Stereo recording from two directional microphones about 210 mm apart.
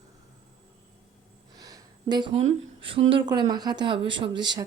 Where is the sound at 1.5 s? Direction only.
15° right (ahead or behind).